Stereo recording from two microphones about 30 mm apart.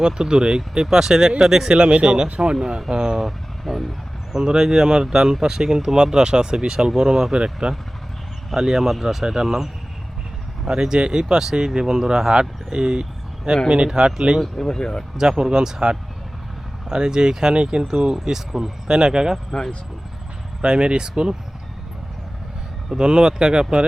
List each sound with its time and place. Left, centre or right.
0.0 s speech: right
3.2 s speech: centre
4.3 s speech: centre
7.3 s speech: right
8.5 s speech: centre
10.7 s speech: right
14.4 s speech: centre
14.8 s speech: centre
15.2 s speech: right
18.1 s speech: centre
19.5 s speech: centre
20.7 s speech: right
23.0 s speech: right